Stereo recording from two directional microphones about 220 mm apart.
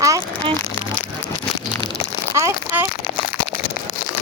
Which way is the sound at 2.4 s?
10° right (ahead or behind).